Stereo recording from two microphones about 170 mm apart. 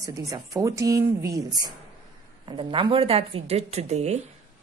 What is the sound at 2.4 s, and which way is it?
A woman's voice, 30° right (ahead or behind).